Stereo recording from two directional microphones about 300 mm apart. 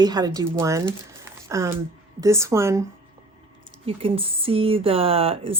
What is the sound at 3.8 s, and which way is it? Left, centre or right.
Speech, centre.